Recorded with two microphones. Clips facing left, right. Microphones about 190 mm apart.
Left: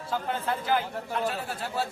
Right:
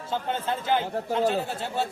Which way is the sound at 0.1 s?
25° right (ahead or behind).